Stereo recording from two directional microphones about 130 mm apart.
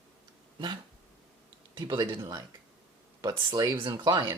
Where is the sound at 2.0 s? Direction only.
25° right (ahead or behind).